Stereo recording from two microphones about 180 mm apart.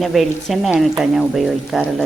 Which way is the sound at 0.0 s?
Centre (ahead or behind).